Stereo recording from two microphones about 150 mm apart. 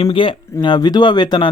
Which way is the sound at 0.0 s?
35° left (ahead or behind).